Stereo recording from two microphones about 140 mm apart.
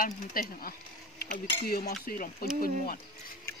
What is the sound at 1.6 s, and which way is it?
Speech, 90° left.